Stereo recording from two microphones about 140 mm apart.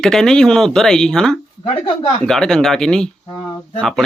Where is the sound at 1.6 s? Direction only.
40° left (ahead or behind).